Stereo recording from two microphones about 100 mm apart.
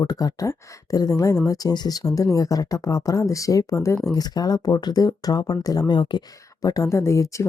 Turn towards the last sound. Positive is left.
turn(degrees=30)  # may be behind; listen again after turning